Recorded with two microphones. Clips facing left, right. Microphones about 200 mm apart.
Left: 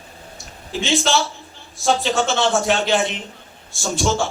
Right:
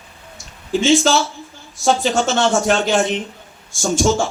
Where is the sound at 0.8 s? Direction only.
Centre (ahead or behind).